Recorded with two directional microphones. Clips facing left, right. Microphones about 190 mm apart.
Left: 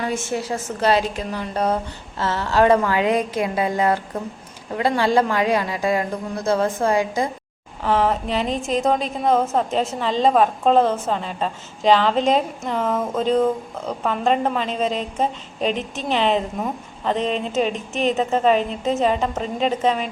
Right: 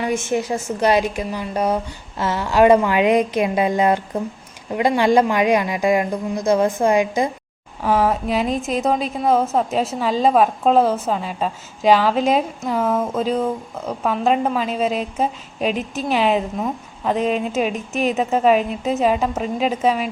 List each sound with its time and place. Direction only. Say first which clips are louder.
0.0 s a woman's voice: right 3 dB; 15° right (ahead or behind)